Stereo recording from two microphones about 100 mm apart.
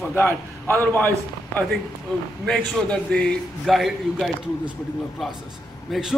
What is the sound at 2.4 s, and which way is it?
A man's voice, 10° left (ahead or behind).